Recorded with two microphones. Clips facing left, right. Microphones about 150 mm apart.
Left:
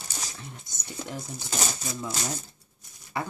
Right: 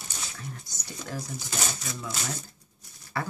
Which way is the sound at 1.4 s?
35° left (ahead or behind).